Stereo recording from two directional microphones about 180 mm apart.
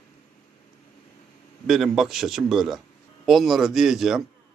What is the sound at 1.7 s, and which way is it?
A man's voice, centre (ahead or behind).